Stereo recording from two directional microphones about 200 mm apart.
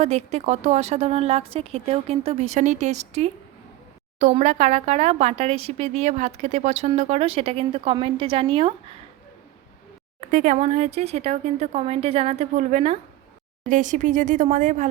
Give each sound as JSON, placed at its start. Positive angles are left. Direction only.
{"t": 0.0, "sound": "speech", "side_deg": -35}
{"t": 10.2, "sound": "speech", "side_deg": -40}